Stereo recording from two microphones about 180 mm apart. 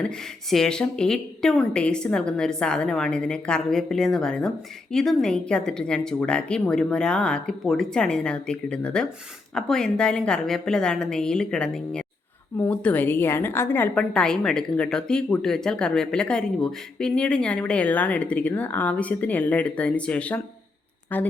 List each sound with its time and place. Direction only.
0.5 s a woman's voice: 5° left (ahead or behind)